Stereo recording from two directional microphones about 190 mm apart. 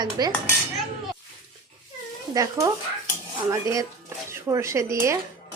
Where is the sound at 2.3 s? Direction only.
15° right (ahead or behind).